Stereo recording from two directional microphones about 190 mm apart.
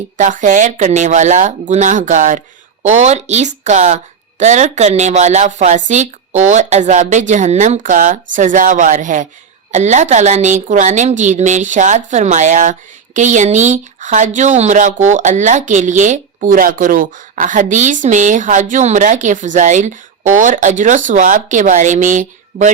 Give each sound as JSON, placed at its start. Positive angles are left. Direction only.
{"t": 0.2, "sound": "speech", "side_deg": -40}